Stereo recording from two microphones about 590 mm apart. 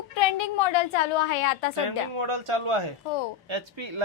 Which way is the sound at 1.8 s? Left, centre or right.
Right.